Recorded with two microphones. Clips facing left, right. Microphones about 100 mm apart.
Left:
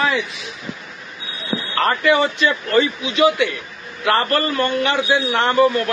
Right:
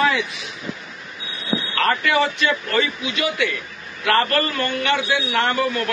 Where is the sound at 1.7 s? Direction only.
25° left (ahead or behind).